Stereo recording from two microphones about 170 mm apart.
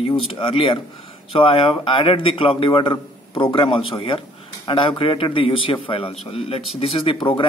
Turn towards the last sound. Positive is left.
turn(degrees=30)  # may be behind; listen again after turning